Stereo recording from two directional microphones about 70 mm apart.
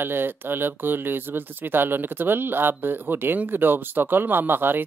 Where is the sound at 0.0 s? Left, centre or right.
Right.